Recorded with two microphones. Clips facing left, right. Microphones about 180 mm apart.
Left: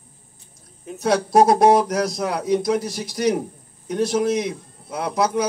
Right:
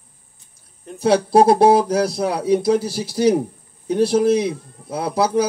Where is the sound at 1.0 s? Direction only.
30° right (ahead or behind).